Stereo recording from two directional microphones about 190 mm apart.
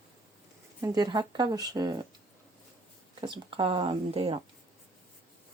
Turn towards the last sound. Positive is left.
turn(degrees=-30)  # may be behind; listen again after turning